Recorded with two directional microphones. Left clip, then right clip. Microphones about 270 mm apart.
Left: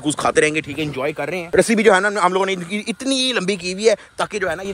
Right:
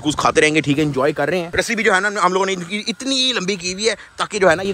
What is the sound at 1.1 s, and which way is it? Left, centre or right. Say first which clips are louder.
Speech: right 5 dB; right.